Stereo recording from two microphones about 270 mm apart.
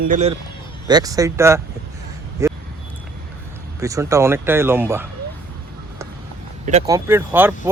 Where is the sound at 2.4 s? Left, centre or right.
Centre.